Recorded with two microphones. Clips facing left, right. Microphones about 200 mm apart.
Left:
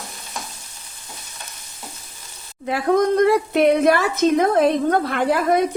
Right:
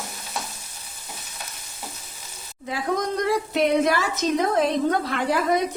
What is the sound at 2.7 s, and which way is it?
Speech, 60° left (ahead or behind).